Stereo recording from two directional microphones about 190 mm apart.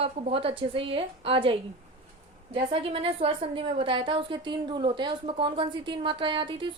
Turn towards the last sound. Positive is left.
turn(degrees=-25)  # may be behind; listen again after turning